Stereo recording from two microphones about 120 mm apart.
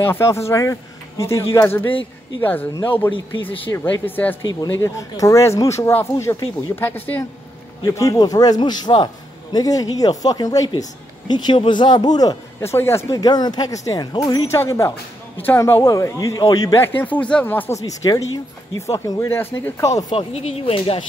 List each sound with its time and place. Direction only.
0.0 s speech: 20° left (ahead or behind)
2.7 s a man's voice: 40° left (ahead or behind)
3.0 s speech: 15° left (ahead or behind)
4.5 s speech: 30° left (ahead or behind)
7.8 s a man's voice: 30° left (ahead or behind)
16.8 s speech: 15° left (ahead or behind)
20.2 s speech: 55° left (ahead or behind)